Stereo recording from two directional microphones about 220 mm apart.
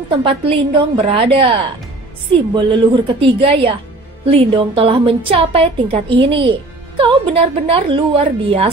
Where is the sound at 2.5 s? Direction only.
20° right (ahead or behind).